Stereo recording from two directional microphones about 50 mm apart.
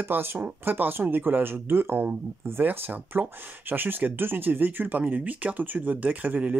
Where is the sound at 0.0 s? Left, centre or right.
Right.